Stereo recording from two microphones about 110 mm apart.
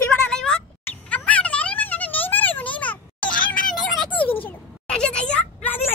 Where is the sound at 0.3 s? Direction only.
5° left (ahead or behind).